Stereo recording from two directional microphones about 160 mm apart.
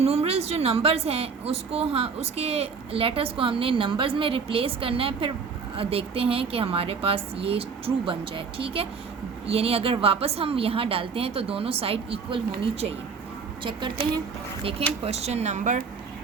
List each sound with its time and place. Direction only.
0.0 s a woman's voice: 40° right (ahead or behind)
13.7 s a woman's voice: 30° right (ahead or behind); by 15.8 s 50° right (ahead or behind)